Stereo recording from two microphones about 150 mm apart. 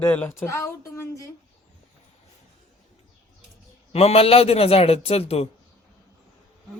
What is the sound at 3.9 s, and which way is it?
A man's voice, 40° left (ahead or behind).